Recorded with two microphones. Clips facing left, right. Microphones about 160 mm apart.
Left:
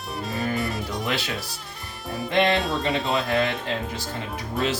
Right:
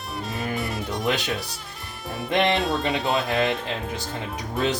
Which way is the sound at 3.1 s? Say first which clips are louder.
Right 1 dB; 20° right (ahead or behind).